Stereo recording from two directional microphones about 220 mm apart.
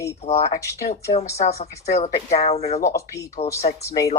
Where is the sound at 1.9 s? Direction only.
30° left (ahead or behind).